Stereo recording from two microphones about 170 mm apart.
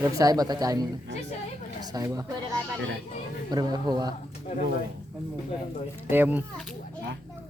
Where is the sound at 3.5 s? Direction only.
25° right (ahead or behind).